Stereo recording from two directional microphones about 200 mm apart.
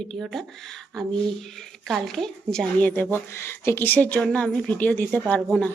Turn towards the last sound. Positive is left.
turn(degrees=5)  # may be behind; listen again after turning